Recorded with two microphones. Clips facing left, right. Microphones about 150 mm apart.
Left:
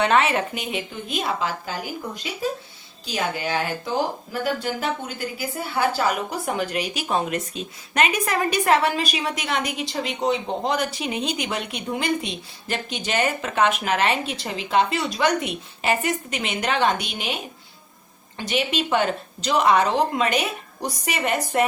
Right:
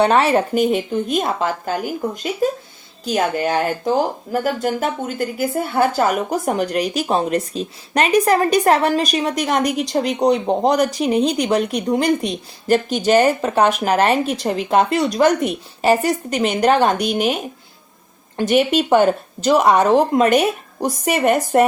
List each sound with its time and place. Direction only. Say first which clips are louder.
0.0 s speech: right 5 dB; 35° right (ahead or behind)